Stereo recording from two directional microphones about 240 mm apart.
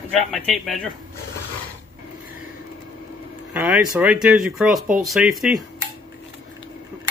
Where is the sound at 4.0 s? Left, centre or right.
Centre.